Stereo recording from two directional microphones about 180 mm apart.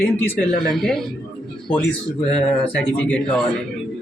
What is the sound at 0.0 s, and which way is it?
Speech, 15° left (ahead or behind).